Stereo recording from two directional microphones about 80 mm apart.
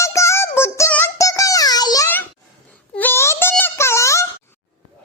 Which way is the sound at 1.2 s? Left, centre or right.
Left.